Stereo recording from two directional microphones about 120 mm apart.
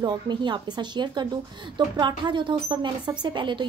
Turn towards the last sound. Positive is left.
turn(degrees=-40)  # may be behind; listen again after turning